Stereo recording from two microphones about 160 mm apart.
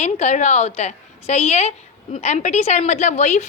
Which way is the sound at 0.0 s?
45° left (ahead or behind).